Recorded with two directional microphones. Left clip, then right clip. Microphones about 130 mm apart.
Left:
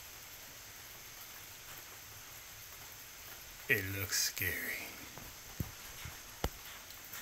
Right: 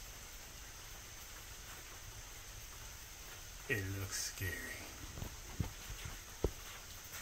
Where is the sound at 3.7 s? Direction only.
35° left (ahead or behind).